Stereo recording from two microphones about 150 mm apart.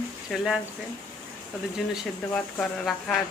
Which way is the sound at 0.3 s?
Centre (ahead or behind).